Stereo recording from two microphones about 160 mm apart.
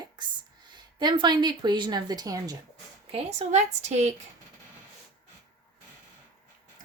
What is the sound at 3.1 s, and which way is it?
Speech, 45° right (ahead or behind).